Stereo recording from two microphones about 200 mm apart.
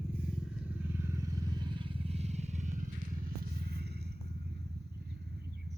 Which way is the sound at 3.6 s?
55° right (ahead or behind).